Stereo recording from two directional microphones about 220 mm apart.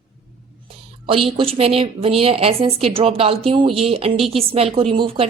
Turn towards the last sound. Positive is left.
turn(degrees=-25)  # may be behind; listen again after turning